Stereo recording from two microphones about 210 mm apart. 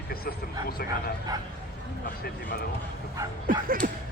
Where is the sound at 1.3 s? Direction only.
20° right (ahead or behind).